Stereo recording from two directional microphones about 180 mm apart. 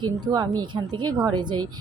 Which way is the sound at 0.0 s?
20° right (ahead or behind).